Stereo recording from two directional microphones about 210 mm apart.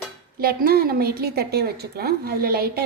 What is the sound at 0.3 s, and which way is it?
A woman's voice, 45° right (ahead or behind).